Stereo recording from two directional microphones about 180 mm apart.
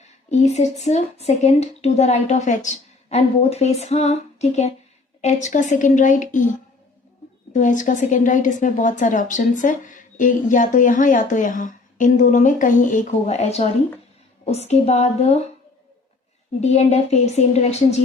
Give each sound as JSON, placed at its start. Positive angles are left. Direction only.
{"t": 0.3, "sound": "a woman's voice", "side_deg": 40}
{"t": 7.5, "sound": "a woman's voice", "side_deg": 45}
{"t": 16.6, "sound": "a woman's voice", "side_deg": 40}